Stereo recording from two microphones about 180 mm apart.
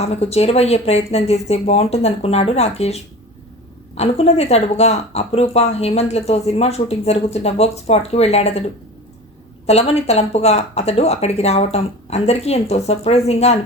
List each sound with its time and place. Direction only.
0.0 s speech: 35° left (ahead or behind)
9.6 s speech: 35° left (ahead or behind)